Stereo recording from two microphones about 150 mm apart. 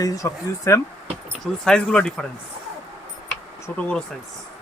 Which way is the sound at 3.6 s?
10° left (ahead or behind).